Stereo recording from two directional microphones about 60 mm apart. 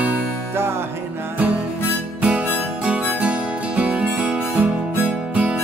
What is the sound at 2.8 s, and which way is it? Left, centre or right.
Music, right.